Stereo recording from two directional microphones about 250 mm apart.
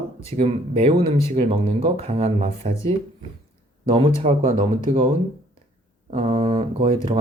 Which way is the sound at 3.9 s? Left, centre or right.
Right.